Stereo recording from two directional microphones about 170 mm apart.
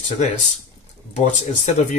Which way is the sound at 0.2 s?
45° left (ahead or behind).